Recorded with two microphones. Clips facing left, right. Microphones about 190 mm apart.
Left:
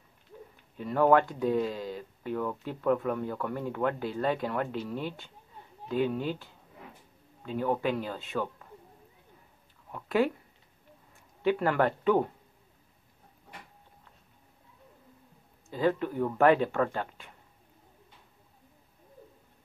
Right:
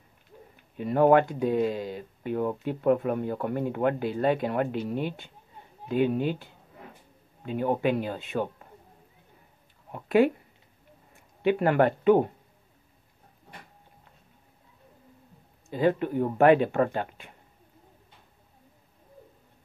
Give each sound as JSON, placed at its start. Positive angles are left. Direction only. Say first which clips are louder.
{"t": 0.7, "sound": "speech", "louder": "right 3 dB", "side_deg": -20}
{"t": 9.8, "sound": "speech", "louder": "right 5 dB", "side_deg": -20}
{"t": 11.4, "sound": "speech", "louder": "right 4 dB", "side_deg": -20}
{"t": 15.7, "sound": "speech", "louder": "right 3 dB", "side_deg": -20}